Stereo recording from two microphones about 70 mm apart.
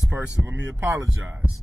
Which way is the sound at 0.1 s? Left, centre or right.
Right.